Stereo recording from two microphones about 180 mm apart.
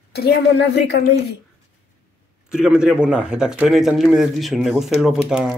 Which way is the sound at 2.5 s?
5° right (ahead or behind).